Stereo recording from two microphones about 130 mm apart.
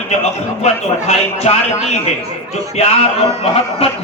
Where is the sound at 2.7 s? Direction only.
55° left (ahead or behind).